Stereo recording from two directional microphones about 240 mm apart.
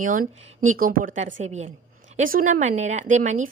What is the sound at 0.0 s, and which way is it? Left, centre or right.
A woman's voice, right.